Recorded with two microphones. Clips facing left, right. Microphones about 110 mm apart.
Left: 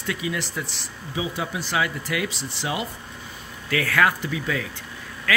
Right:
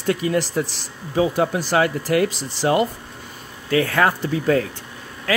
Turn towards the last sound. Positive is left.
turn(degrees=-30)  # may be behind; listen again after turning